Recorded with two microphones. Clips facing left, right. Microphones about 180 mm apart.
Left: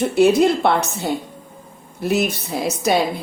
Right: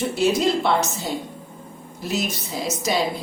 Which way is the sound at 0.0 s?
60° left (ahead or behind).